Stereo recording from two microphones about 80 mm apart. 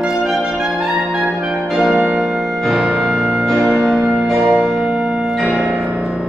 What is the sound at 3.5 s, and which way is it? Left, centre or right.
Music, centre.